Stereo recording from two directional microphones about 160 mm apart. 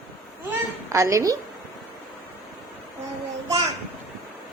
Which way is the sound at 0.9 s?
20° right (ahead or behind).